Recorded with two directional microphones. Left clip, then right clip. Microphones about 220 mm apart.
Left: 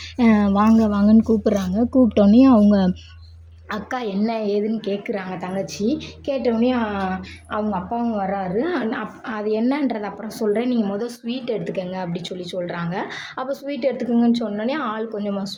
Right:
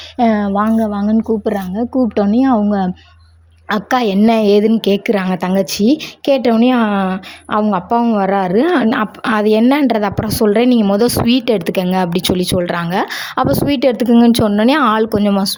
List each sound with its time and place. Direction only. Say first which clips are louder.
0.2 s speech: right 4 dB; 30° right (ahead or behind)
3.7 s a woman's voice: right 11 dB; 45° right (ahead or behind)